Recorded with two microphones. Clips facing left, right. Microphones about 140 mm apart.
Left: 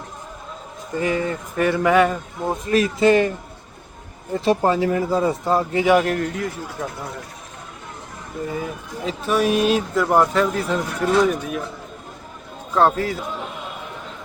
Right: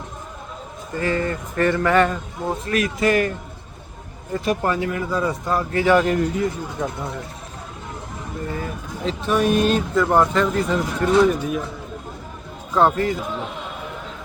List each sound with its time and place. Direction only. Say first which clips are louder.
0.9 s speech: left 1 dB; 15° left (ahead or behind)
2.6 s speech: left 5 dB; 25° left (ahead or behind)
4.4 s speech: left 4 dB; 25° left (ahead or behind)
5.8 s speech: right 1 dB; 10° left (ahead or behind)
6.1 s speech: right 3 dB; 5° right (ahead or behind)
8.4 s speech: left 2 dB; 10° left (ahead or behind)
12.7 s speech: even; centre (ahead or behind)